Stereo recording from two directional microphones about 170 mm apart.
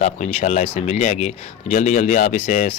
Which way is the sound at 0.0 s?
45° left (ahead or behind).